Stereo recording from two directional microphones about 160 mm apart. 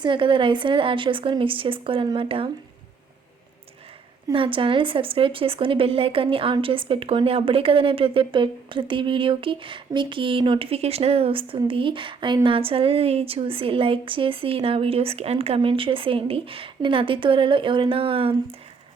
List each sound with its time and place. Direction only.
0.0 s speech: 30° right (ahead or behind)
4.3 s speech: 30° right (ahead or behind)